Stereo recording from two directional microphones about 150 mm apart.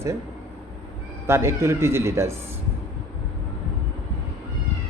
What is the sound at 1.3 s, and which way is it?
A man's voice, 15° right (ahead or behind).